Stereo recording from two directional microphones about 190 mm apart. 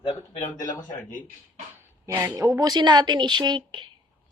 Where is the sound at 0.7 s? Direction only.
45° left (ahead or behind).